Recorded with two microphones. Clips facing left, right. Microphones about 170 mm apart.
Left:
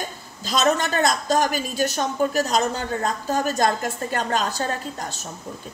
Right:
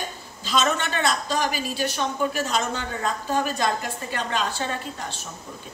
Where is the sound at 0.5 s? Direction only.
40° left (ahead or behind).